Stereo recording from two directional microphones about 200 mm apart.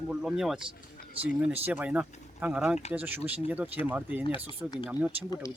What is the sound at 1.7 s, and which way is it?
Speech, 10° right (ahead or behind).